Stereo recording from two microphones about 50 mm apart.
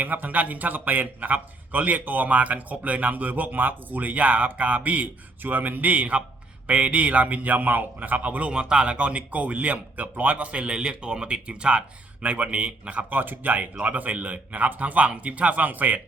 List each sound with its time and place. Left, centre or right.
0.0 s a man's voice: right